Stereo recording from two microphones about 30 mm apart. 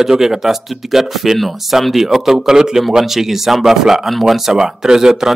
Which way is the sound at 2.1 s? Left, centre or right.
Centre.